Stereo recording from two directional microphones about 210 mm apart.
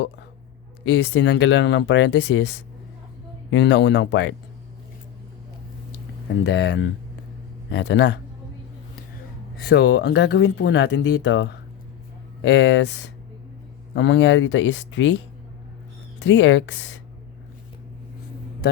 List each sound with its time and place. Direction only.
0.9 s speech: 60° left (ahead or behind)
6.4 s speech: 60° left (ahead or behind)
9.6 s speech: 55° left (ahead or behind)
16.2 s speech: 60° left (ahead or behind)